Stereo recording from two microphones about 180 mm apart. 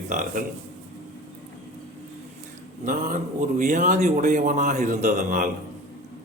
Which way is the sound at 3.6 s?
45° right (ahead or behind).